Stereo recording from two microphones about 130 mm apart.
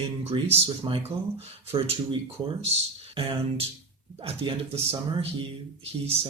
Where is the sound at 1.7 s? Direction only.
45° right (ahead or behind).